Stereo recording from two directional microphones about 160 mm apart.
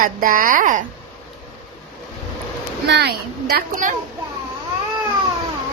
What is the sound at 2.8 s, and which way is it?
Speech, 90° right.